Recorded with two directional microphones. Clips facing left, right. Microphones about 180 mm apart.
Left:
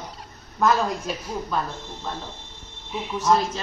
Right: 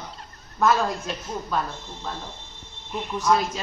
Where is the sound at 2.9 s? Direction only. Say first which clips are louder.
Even; centre (ahead or behind).